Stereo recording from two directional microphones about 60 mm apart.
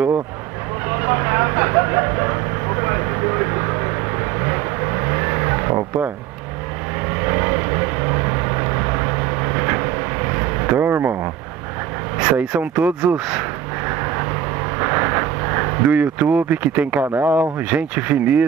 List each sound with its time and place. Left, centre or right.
0.8 s vehicle: right
7.2 s vehicle: right
12.2 s speech: right
14.8 s a sound: right
17.0 s speech: right
17.6 s speech: right